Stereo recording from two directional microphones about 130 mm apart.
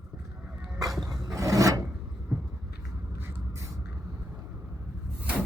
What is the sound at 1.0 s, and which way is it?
Filing, 30° right (ahead or behind).